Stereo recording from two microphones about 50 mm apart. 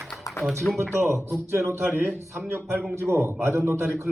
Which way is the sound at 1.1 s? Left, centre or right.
Right.